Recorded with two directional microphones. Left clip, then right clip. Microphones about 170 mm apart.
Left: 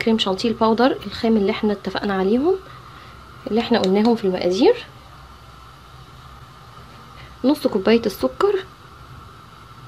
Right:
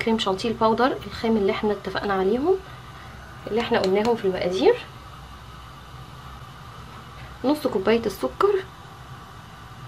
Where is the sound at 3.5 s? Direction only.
40° left (ahead or behind).